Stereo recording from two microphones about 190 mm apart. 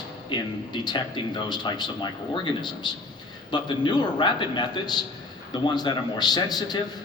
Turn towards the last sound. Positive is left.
turn(degrees=20)  # may be behind; listen again after turning